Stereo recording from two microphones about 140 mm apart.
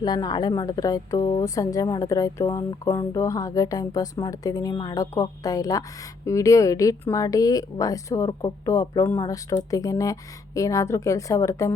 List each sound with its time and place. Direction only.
0.0 s a woman's voice: 30° left (ahead or behind)